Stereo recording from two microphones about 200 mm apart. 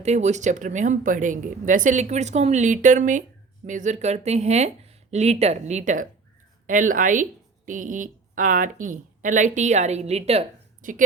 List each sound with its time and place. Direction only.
0.0 s speech: 35° right (ahead or behind)